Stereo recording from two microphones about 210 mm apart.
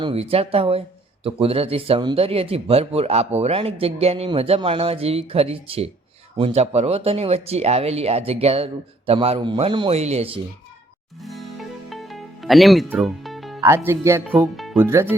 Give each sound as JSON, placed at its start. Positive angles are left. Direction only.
{"t": 0.0, "sound": "speech", "side_deg": -25}
{"t": 11.2, "sound": "music", "side_deg": 0}
{"t": 13.6, "sound": "speech", "side_deg": -15}
{"t": 14.5, "sound": "speech", "side_deg": 0}
{"t": 14.8, "sound": "speech", "side_deg": -15}